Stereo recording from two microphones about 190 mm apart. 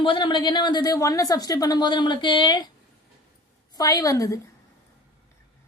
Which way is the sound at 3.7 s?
20° left (ahead or behind).